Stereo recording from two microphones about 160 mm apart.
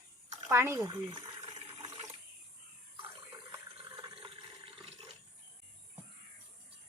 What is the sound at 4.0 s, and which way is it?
Water, 30° right (ahead or behind).